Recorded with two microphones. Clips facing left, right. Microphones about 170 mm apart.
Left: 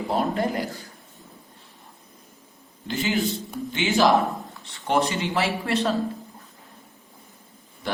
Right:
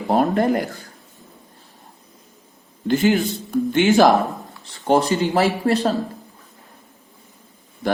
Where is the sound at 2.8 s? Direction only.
50° right (ahead or behind).